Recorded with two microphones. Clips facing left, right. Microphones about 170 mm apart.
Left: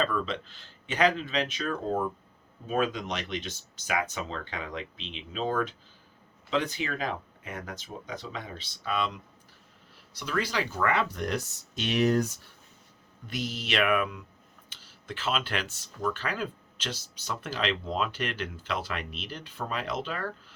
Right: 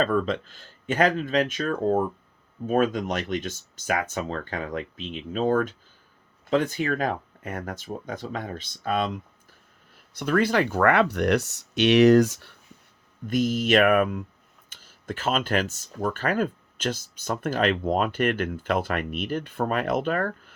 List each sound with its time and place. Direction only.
0.0 s speech: 50° right (ahead or behind)
10.2 s speech: 55° right (ahead or behind); by 12.5 s 80° right
13.2 s speech: 50° right (ahead or behind)